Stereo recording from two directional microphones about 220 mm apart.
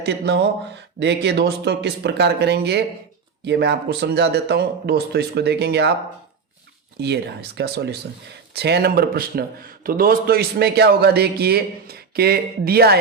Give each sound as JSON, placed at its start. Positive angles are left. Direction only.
{"t": 0.0, "sound": "a man's voice", "side_deg": -50}
{"t": 7.0, "sound": "a man's voice", "side_deg": -50}